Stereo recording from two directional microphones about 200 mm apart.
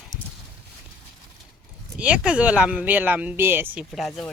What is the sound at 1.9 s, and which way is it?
Speech, 5° right (ahead or behind).